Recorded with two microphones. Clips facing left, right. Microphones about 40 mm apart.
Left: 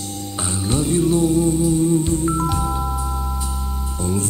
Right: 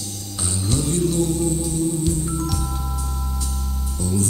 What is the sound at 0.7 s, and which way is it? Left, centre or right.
Music, left.